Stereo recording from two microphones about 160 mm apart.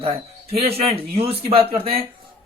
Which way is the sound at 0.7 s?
40° right (ahead or behind).